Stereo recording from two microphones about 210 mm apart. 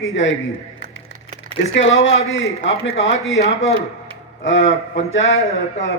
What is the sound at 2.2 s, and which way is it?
Speech, 65° left (ahead or behind).